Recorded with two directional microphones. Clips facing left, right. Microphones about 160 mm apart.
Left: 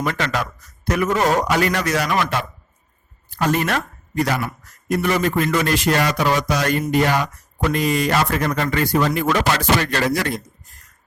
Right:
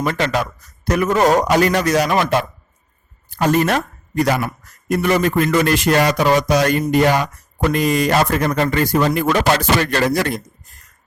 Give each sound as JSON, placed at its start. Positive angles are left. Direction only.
{"t": 0.0, "sound": "a man's voice", "side_deg": -30}